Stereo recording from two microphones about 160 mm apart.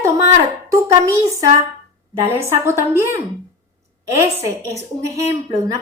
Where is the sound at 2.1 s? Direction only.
15° right (ahead or behind).